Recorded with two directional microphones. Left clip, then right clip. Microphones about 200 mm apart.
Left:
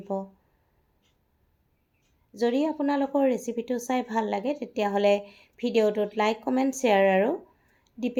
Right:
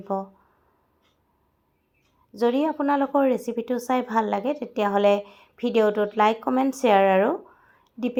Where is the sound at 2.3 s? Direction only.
10° right (ahead or behind).